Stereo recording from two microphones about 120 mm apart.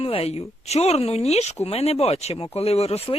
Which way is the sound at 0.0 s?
55° left (ahead or behind).